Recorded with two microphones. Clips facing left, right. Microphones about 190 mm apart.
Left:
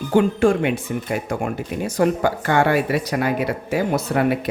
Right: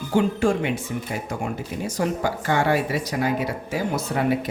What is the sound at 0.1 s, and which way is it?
Speech, 55° left (ahead or behind).